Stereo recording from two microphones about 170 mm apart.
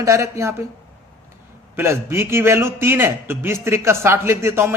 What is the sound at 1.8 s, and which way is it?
A man's voice, 15° right (ahead or behind).